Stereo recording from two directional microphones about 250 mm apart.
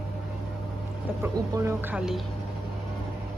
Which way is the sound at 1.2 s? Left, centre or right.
Centre.